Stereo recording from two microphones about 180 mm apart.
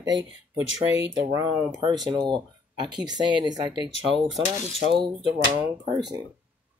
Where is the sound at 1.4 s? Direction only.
25° right (ahead or behind).